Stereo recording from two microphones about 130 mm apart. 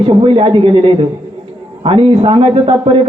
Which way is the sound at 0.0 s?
45° right (ahead or behind).